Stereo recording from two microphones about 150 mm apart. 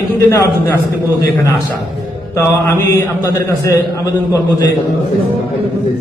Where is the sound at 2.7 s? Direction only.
20° left (ahead or behind).